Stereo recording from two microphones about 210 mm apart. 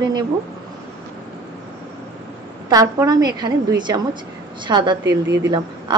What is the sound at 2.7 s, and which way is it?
A woman's voice, 15° right (ahead or behind).